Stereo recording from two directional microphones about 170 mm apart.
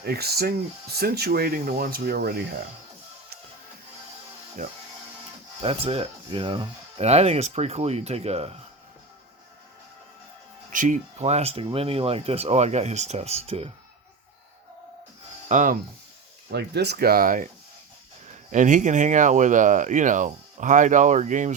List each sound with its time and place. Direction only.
0.0 s speech: 70° right (ahead or behind)
4.6 s speech: 50° right (ahead or behind)
5.6 s speech: 35° right (ahead or behind)
10.7 s speech: 50° right (ahead or behind)
15.4 s speech: 50° right (ahead or behind)
16.5 s speech: 75° right (ahead or behind); by 17.5 s 55° right (ahead or behind)
18.5 s speech: 45° right (ahead or behind)